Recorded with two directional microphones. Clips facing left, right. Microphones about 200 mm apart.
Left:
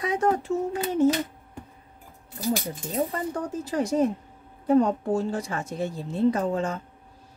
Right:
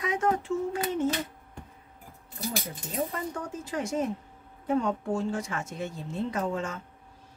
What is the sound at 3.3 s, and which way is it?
Speech, 35° left (ahead or behind).